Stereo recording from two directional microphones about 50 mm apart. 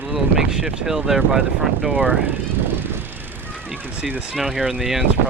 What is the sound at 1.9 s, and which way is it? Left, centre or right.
Speech, right.